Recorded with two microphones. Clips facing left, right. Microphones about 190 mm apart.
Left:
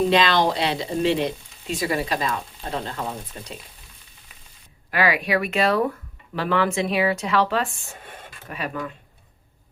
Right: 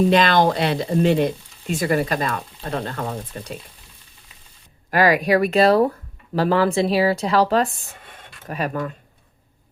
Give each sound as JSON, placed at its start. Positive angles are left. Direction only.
{"t": 0.1, "sound": "speech", "side_deg": -50}
{"t": 4.9, "sound": "speech", "side_deg": -40}